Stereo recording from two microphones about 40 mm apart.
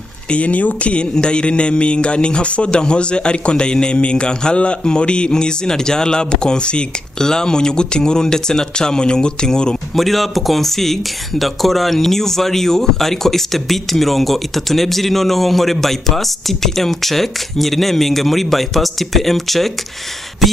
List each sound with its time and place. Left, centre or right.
0.3 s speech: left
9.9 s speech: centre